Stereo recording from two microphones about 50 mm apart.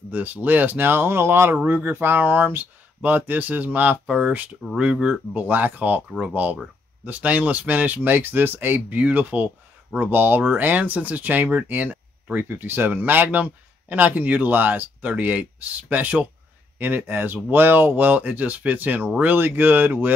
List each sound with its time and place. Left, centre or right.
0.1 s speech: right
4.6 s speech: right
12.4 s speech: right
16.7 s speech: right